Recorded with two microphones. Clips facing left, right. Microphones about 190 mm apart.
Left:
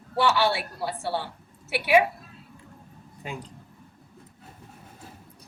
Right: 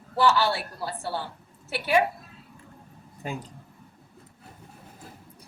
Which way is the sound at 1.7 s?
10° left (ahead or behind).